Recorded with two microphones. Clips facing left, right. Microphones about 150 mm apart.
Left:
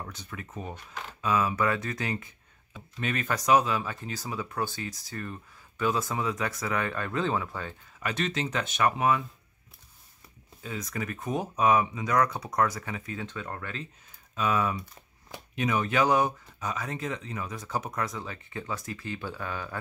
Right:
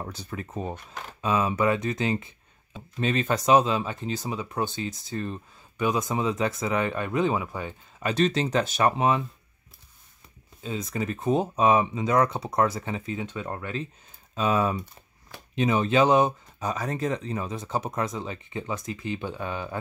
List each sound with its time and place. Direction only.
0.0 s speech: 35° right (ahead or behind); by 7.7 s 15° right (ahead or behind)
8.0 s speech: 35° right (ahead or behind)
10.6 s speech: 25° right (ahead or behind)